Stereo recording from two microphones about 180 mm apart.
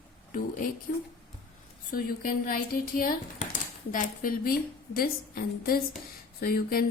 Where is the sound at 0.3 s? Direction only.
50° left (ahead or behind).